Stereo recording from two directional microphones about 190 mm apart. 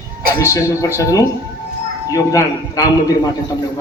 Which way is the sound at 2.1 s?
20° left (ahead or behind).